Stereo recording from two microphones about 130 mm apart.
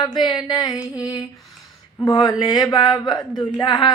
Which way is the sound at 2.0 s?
30° left (ahead or behind).